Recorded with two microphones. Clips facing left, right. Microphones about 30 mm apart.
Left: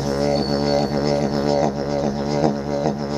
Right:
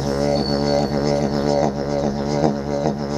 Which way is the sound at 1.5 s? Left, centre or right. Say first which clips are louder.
Even; centre.